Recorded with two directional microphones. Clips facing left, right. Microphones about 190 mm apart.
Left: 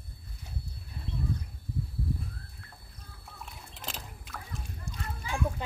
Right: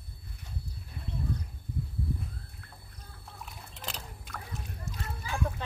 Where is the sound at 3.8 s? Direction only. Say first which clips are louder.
Even; centre (ahead or behind).